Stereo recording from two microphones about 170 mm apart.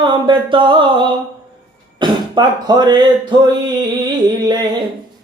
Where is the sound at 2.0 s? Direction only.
25° right (ahead or behind).